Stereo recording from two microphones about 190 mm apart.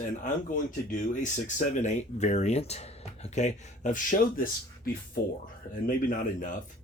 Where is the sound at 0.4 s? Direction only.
45° left (ahead or behind).